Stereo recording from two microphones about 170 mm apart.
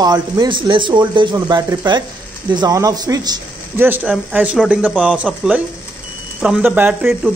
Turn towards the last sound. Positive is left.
turn(degrees=-5)  # may be behind; listen again after turning